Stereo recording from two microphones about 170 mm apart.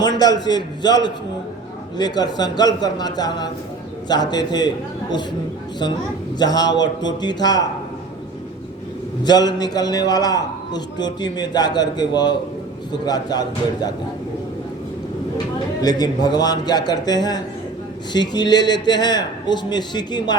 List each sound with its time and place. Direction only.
0.0 s a man's voice: 25° left (ahead or behind)
6.4 s a man's voice: 25° left (ahead or behind)
9.2 s a man's voice: 25° left (ahead or behind)
15.8 s a man's voice: 25° left (ahead or behind)